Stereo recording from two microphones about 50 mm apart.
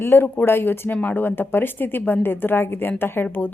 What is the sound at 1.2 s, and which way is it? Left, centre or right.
Speech, left.